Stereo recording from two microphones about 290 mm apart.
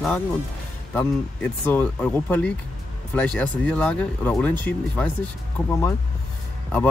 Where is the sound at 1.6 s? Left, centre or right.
Centre.